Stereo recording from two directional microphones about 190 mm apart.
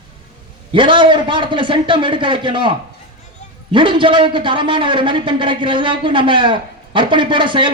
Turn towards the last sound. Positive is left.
turn(degrees=-25)  # may be behind; listen again after turning